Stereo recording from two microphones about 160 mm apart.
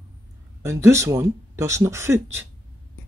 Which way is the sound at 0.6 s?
20° right (ahead or behind).